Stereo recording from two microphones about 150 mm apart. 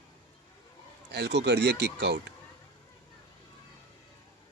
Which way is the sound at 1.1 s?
90° right.